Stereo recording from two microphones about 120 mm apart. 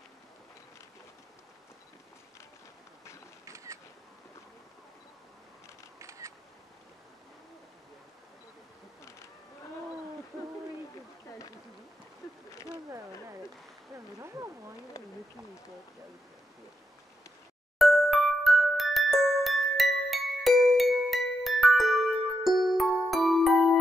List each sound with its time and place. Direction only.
3.4 s single-lens reflex camera: 25° right (ahead or behind)
5.9 s single-lens reflex camera: 25° right (ahead or behind)
13.9 s a sound: 25° right (ahead or behind)
17.7 s glockenspiel: centre (ahead or behind)
22.6 s music: centre (ahead or behind)